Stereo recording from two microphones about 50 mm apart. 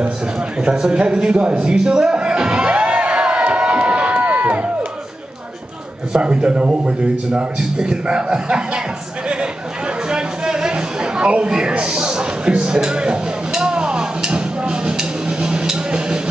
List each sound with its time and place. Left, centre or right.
0.6 s speech: centre
1.6 s music: centre
6.1 s speech: centre
10.0 s a sound: centre